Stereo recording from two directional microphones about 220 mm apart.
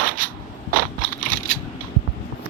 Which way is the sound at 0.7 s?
40° right (ahead or behind).